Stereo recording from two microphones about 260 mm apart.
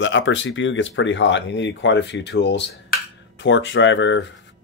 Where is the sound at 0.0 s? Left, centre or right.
Left.